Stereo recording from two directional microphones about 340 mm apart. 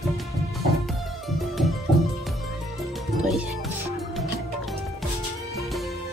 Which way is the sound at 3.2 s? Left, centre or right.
Centre.